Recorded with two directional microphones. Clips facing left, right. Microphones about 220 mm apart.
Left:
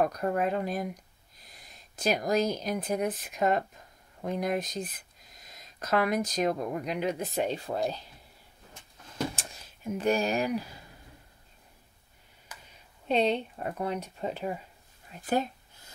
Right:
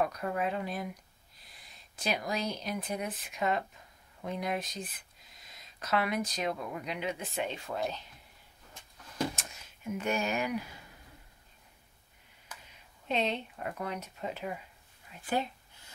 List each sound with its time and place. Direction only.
0.0 s speech: 45° left (ahead or behind)
9.3 s speech: 30° left (ahead or behind)
13.1 s speech: 35° left (ahead or behind)